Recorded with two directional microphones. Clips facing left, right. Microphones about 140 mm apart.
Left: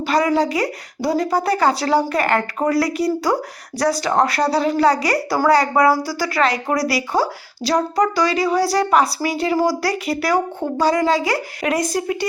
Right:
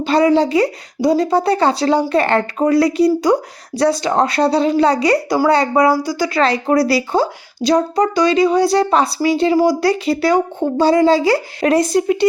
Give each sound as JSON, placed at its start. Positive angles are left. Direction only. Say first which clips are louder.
{"t": 0.0, "sound": "speech", "louder": "right 4 dB", "side_deg": -25}